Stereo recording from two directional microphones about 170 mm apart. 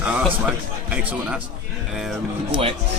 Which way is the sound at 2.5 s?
35° right (ahead or behind).